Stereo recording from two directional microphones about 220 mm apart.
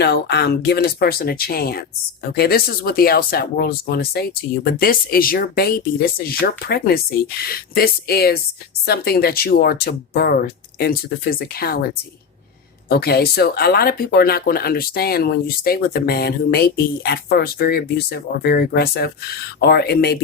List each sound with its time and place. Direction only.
0.0 s speech: 50° left (ahead or behind)
12.9 s speech: 45° left (ahead or behind)